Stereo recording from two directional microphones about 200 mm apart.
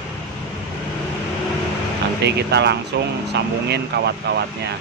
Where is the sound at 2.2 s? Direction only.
55° right (ahead or behind).